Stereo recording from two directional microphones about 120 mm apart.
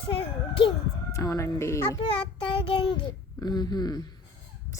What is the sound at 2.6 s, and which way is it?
A child's voice, 45° left (ahead or behind).